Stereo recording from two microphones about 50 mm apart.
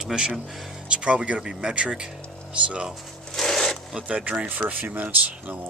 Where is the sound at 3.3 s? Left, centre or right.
Centre.